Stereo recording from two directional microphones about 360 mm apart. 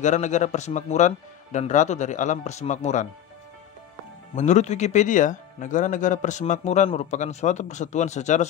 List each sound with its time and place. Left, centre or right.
0.0 s speech: centre
4.4 s speech: centre